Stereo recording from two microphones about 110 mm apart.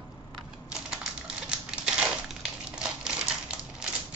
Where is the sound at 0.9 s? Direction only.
5° right (ahead or behind).